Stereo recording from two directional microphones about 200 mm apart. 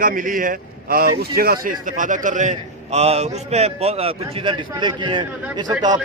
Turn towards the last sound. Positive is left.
turn(degrees=-20)  # may be behind; listen again after turning